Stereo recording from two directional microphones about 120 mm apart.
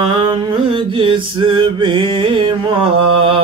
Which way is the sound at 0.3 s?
45° right (ahead or behind).